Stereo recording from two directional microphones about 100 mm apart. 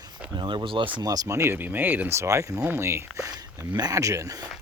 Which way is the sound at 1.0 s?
40° right (ahead or behind).